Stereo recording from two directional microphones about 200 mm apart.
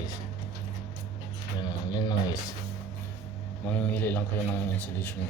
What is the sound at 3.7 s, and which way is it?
Speech, 5° left (ahead or behind).